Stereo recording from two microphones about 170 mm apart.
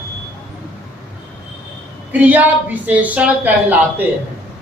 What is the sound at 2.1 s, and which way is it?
Speech, 10° right (ahead or behind).